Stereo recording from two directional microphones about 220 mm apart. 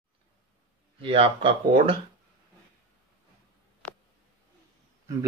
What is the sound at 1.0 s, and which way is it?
Speech, 25° right (ahead or behind).